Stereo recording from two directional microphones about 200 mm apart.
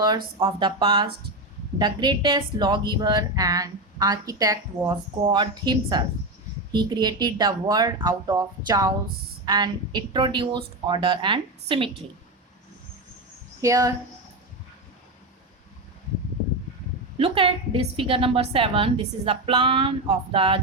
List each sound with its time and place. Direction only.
0.3 s a woman's voice: 20° right (ahead or behind)
13.6 s speech: 15° right (ahead or behind)
17.2 s a woman's voice: 30° right (ahead or behind)